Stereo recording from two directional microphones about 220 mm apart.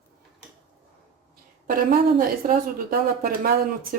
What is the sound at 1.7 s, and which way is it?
Speech, 40° right (ahead or behind).